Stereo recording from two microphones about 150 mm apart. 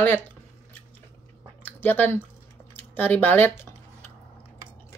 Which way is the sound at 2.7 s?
10° left (ahead or behind).